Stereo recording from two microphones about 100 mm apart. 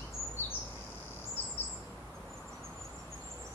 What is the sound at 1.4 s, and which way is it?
Bird vocalization, 20° left (ahead or behind).